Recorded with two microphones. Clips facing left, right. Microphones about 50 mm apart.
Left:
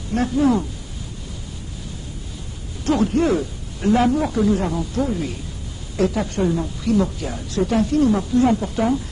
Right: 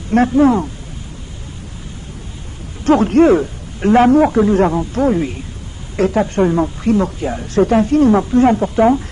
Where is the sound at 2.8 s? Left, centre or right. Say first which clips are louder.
Right 8 dB; right.